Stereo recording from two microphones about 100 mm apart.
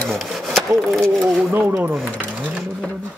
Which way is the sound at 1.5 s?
20° right (ahead or behind).